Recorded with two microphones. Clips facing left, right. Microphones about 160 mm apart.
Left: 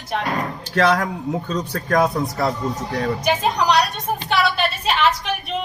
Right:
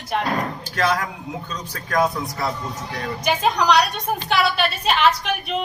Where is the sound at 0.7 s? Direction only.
60° left (ahead or behind).